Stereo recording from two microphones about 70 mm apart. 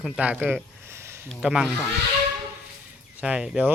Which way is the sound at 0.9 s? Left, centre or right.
Right.